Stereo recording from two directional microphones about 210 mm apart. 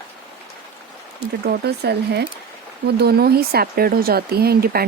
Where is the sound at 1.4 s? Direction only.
50° right (ahead or behind).